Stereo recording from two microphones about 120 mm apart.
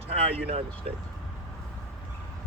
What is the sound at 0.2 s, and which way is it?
Speech, 55° right (ahead or behind).